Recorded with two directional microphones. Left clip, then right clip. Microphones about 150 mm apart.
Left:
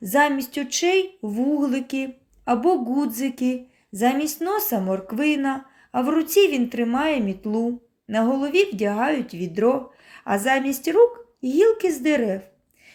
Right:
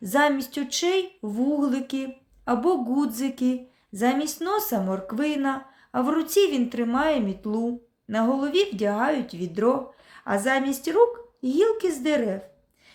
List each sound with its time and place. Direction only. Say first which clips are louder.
0.0 s speech: left 2 dB; 10° left (ahead or behind)